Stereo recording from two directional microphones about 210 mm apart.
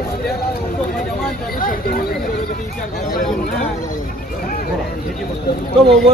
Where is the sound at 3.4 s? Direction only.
40° left (ahead or behind).